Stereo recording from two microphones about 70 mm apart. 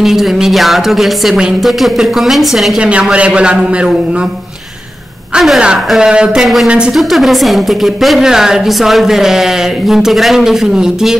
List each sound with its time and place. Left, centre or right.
0.0 s a woman's voice: centre
2.8 s a man's voice: centre
5.3 s a woman's voice: centre
6.4 s a woman's voice: centre